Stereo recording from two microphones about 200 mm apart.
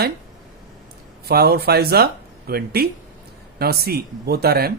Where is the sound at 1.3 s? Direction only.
50° right (ahead or behind).